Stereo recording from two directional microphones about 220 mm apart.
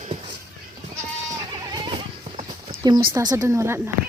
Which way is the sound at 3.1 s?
15° right (ahead or behind).